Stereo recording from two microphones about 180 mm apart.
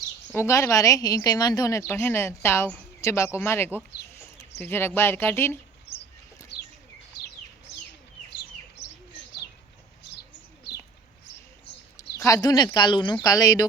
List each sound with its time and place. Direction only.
0.3 s speech: 15° left (ahead or behind)
5.9 s a sound: 75° left (ahead or behind)
11.9 s speech: 15° left (ahead or behind)